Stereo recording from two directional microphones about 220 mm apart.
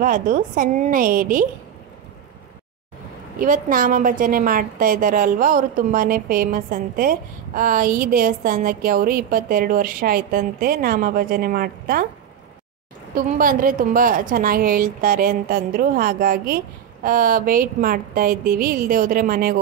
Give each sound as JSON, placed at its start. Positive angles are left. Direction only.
{"t": 0.0, "sound": "a woman's voice", "side_deg": -40}
{"t": 3.3, "sound": "a woman's voice", "side_deg": -40}
{"t": 13.1, "sound": "a woman's voice", "side_deg": -40}